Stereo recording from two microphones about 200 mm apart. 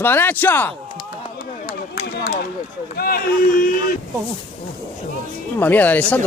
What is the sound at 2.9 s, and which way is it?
Speech, 50° left (ahead or behind).